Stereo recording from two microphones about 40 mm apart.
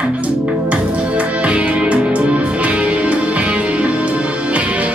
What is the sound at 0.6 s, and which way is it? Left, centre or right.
Music, right.